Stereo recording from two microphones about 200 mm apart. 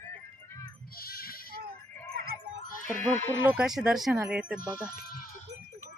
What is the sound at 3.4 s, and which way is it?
Speech, 5° right (ahead or behind).